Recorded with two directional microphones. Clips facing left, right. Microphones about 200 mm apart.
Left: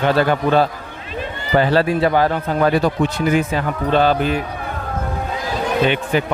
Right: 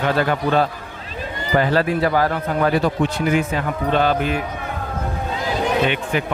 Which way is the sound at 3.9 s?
30° left (ahead or behind).